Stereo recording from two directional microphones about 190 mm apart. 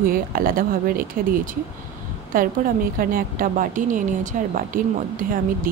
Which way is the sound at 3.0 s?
50° right (ahead or behind).